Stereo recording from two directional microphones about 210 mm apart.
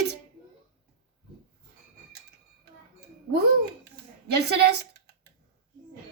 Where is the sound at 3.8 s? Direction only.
50° right (ahead or behind).